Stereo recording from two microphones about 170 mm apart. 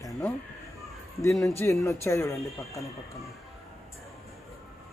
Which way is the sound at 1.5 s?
15° left (ahead or behind).